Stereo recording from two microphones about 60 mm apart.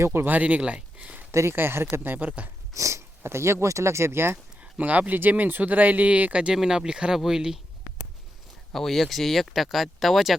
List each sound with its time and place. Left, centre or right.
0.0 s speech: right
0.3 s speech: right
1.3 s speech: right
1.5 s speech: right
1.9 s speech: right
2.7 s speech: right
3.2 s speech: right
4.6 s speech: right; by 7.6 s centre
8.7 s speech: centre